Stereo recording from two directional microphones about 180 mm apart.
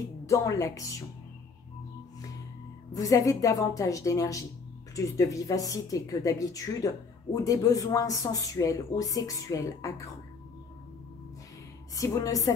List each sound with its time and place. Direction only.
0.3 s a woman's voice: 15° left (ahead or behind)
2.9 s speech: 20° left (ahead or behind)
11.9 s speech: 20° left (ahead or behind)